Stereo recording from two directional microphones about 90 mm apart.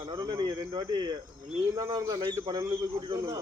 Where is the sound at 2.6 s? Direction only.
30° right (ahead or behind).